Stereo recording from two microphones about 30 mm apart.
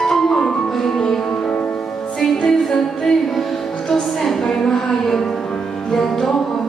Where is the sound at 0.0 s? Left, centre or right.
Centre.